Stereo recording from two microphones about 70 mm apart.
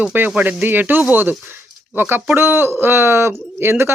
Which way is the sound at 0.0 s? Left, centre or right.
Right.